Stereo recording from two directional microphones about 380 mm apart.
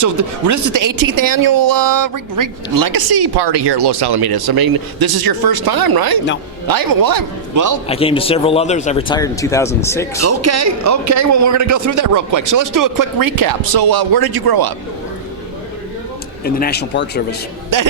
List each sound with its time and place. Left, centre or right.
0.0 s a man's voice: right
7.9 s speech: centre
10.2 s a man's voice: right
16.4 s speech: left
17.7 s a man's voice: right